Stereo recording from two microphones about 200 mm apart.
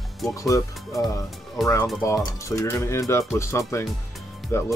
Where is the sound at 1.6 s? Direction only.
15° left (ahead or behind).